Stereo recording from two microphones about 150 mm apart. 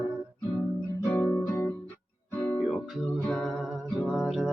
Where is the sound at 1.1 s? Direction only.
15° left (ahead or behind).